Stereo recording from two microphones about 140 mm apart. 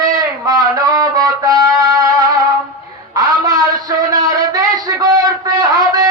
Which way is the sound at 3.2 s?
25° right (ahead or behind).